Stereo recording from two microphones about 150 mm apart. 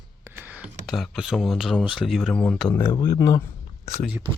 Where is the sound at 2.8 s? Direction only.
15° left (ahead or behind).